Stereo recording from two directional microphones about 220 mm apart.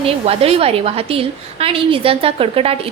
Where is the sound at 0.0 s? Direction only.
25° right (ahead or behind).